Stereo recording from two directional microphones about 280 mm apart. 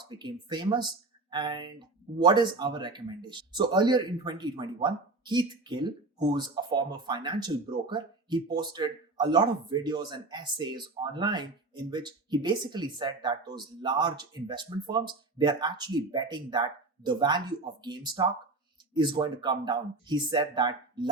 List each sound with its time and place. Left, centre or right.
0.2 s speech: centre